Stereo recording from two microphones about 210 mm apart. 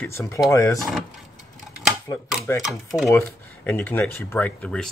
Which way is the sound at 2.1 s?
20° left (ahead or behind).